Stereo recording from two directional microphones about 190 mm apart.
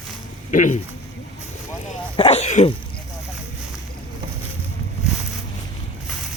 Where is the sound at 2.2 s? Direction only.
35° left (ahead or behind).